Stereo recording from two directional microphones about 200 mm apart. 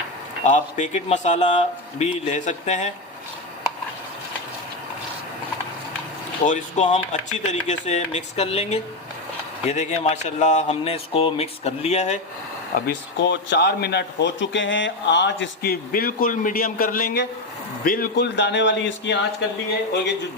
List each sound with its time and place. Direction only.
0.4 s speech: 35° left (ahead or behind)
6.4 s speech: 40° left (ahead or behind)
12.8 s a man's voice: 60° left (ahead or behind)
18.3 s speech: 65° left (ahead or behind)